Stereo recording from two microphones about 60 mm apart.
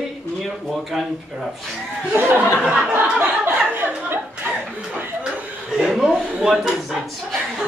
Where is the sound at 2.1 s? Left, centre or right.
Right.